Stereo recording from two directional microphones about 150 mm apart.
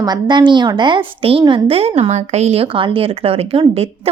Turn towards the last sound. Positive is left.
turn(degrees=-40)  # may be behind; listen again after turning